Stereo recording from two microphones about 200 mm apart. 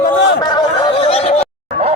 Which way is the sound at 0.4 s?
20° left (ahead or behind).